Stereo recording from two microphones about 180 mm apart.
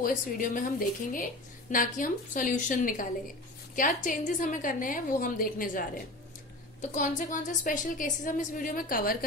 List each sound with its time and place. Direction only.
0.0 s a woman's voice: 50° left (ahead or behind)